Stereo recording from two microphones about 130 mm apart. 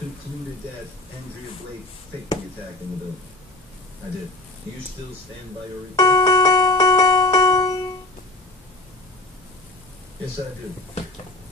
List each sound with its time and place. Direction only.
5.9 s music: 30° left (ahead or behind)